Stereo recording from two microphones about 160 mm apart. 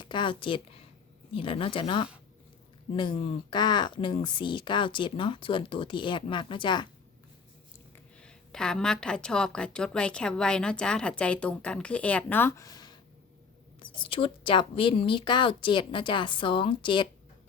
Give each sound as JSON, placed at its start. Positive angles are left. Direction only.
{"t": 0.0, "sound": "speech", "side_deg": 30}
{"t": 8.2, "sound": "a woman's voice", "side_deg": 5}